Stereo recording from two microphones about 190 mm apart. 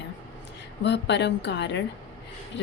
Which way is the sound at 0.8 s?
65° left (ahead or behind).